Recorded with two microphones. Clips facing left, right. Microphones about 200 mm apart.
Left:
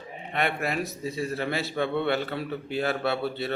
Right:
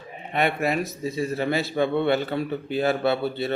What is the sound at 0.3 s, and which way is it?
A man's voice, centre (ahead or behind).